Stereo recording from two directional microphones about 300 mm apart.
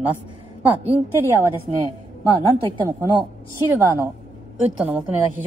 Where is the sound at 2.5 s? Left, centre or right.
Centre.